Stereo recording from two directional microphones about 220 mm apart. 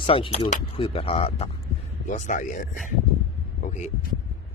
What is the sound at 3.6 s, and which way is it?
Vehicle, 35° left (ahead or behind).